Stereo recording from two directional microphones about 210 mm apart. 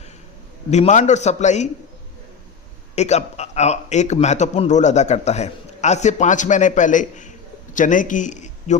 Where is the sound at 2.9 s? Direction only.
30° left (ahead or behind).